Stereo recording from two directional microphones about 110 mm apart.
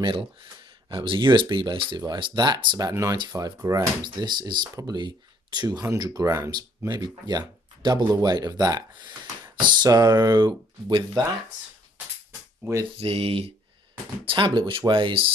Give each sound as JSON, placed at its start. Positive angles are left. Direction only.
{"t": 0.0, "sound": "speech", "side_deg": -45}
{"t": 2.9, "sound": "speech", "side_deg": -30}
{"t": 5.8, "sound": "speech", "side_deg": -30}
{"t": 6.9, "sound": "speech", "side_deg": -40}
{"t": 12.6, "sound": "speech", "side_deg": -25}
{"t": 13.0, "sound": "speech", "side_deg": -60}
{"t": 14.2, "sound": "speech", "side_deg": -50}